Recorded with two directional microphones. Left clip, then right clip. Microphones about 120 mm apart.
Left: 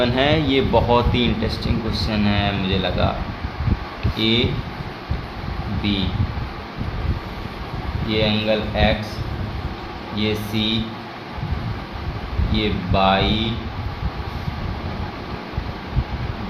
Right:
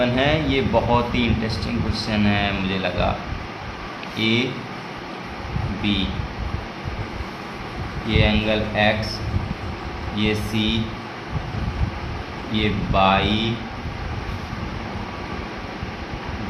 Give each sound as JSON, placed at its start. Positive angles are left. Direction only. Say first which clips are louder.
{"t": 0.0, "sound": "speech", "louder": "left 2 dB", "side_deg": 55}
{"t": 1.9, "sound": "speech", "louder": "right 1 dB", "side_deg": 40}
{"t": 4.2, "sound": "speech", "louder": "left 2 dB", "side_deg": 45}
{"t": 8.1, "sound": "speech", "louder": "left 1 dB", "side_deg": 40}
{"t": 10.2, "sound": "speech", "louder": "even", "side_deg": 40}
{"t": 12.5, "sound": "speech", "louder": "even", "side_deg": 40}